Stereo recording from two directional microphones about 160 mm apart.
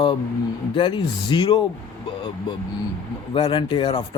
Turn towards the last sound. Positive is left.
turn(degrees=30)  # may be behind; listen again after turning